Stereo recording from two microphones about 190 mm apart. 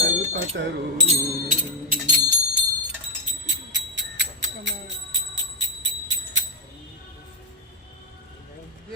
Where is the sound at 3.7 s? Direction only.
75° right (ahead or behind).